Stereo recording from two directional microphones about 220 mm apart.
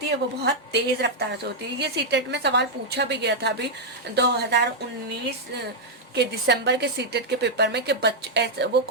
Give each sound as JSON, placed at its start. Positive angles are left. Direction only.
{"t": 0.4, "sound": "a woman's voice", "side_deg": -50}
{"t": 6.1, "sound": "a woman's voice", "side_deg": -50}